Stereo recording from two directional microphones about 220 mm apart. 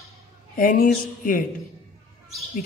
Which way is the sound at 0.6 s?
40° left (ahead or behind).